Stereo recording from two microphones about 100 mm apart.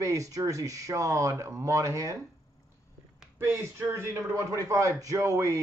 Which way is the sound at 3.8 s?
25° right (ahead or behind).